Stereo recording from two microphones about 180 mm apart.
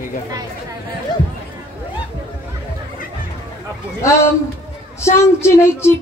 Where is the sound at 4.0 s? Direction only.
15° left (ahead or behind).